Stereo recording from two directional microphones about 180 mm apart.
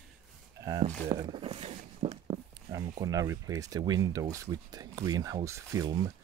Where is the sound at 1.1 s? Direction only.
25° right (ahead or behind).